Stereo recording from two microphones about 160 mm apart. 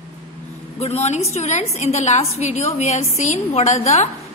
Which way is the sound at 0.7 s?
40° left (ahead or behind).